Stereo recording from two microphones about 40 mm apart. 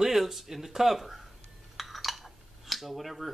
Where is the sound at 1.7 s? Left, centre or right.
Centre.